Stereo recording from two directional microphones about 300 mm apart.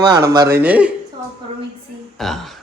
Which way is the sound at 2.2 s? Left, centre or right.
Centre.